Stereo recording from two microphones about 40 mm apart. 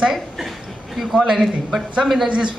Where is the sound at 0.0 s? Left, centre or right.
Centre.